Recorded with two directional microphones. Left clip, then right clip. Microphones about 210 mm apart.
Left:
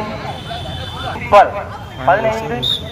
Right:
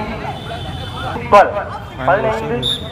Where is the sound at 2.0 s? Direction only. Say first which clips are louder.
Left 1 dB; 40° left (ahead or behind).